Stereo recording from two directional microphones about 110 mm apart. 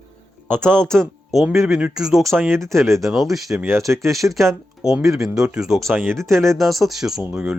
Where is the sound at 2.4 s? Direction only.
20° right (ahead or behind).